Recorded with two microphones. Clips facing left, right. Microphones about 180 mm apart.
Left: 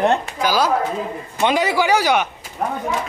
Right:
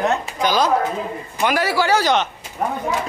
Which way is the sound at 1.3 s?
20° left (ahead or behind).